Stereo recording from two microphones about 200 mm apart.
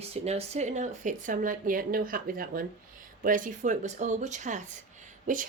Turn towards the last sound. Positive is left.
turn(degrees=-40)  # may be behind; listen again after turning